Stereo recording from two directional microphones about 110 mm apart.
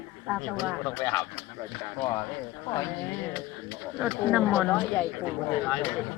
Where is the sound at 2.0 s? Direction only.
35° left (ahead or behind).